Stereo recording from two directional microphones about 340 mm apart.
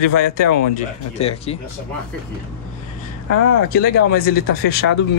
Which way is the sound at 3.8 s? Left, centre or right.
Left.